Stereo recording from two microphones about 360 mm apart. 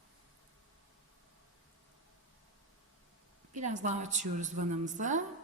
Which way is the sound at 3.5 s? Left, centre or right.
Centre.